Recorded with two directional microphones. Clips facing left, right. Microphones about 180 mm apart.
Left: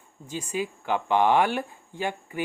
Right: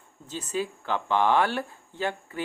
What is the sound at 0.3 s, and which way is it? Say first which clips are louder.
Speech: even; 10° left (ahead or behind).